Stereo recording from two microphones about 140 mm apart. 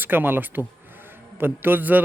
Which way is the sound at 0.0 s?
15° right (ahead or behind).